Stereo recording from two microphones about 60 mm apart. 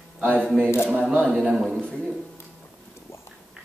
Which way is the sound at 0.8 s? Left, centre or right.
Centre.